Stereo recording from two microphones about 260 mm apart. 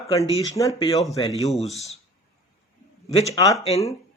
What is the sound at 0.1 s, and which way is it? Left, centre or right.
Speech, centre.